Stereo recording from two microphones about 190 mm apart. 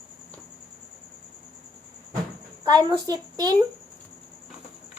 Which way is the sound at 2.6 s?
20° right (ahead or behind).